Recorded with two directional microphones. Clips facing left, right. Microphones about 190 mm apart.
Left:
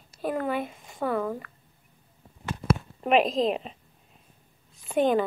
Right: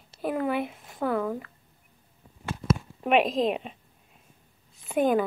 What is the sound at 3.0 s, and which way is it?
Speech, centre (ahead or behind).